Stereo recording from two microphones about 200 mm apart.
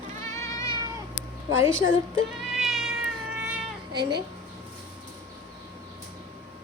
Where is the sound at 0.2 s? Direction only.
15° left (ahead or behind).